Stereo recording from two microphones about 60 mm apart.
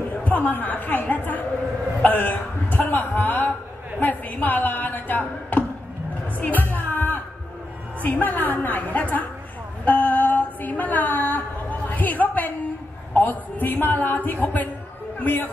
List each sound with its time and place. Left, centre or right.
0.2 s chatter: left
2.0 s a sound: left
6.2 s music: left
8.0 s a woman's voice: left
9.8 s a sound: left
13.1 s a woman's voice: left